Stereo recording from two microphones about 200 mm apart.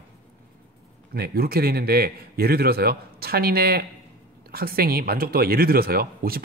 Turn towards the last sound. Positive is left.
turn(degrees=-50)  # may be behind; listen again after turning